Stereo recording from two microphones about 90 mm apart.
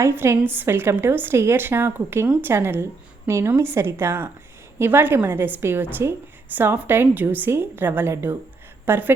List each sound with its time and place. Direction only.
0.0 s a woman's voice: 30° right (ahead or behind)